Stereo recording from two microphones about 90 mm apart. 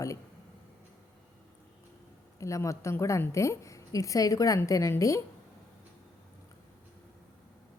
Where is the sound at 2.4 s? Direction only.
35° left (ahead or behind).